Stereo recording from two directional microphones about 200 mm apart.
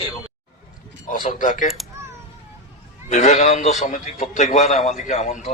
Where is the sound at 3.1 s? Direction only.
35° left (ahead or behind).